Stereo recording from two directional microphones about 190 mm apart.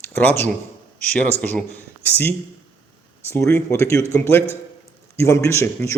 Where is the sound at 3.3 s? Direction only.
10° left (ahead or behind).